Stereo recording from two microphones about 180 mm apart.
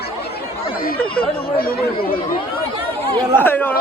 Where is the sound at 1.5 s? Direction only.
55° left (ahead or behind).